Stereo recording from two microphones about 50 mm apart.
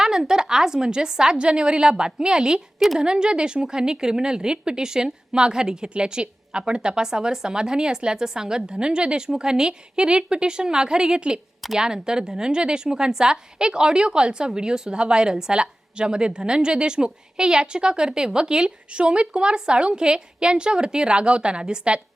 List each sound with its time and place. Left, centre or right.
0.0 s a woman's voice: centre